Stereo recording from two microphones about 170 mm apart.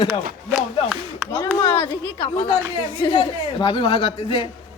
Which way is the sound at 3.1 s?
25° left (ahead or behind).